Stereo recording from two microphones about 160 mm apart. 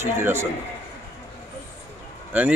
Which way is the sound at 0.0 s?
15° right (ahead or behind).